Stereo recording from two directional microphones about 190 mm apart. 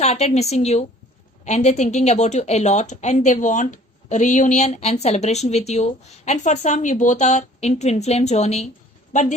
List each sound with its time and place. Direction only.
0.0 s a woman's voice: 35° left (ahead or behind)